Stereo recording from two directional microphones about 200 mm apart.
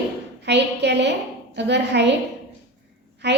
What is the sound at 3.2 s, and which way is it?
Speech, 60° right (ahead or behind).